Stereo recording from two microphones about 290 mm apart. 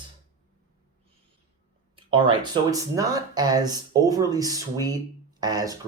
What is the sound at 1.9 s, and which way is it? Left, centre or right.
Speech, centre.